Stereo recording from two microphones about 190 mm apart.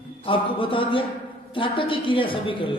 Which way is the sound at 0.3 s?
25° left (ahead or behind).